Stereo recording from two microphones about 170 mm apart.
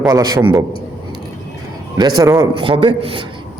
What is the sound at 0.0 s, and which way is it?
Speech, 20° right (ahead or behind).